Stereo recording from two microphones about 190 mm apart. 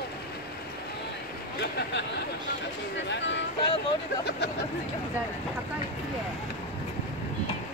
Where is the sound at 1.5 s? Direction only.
60° left (ahead or behind).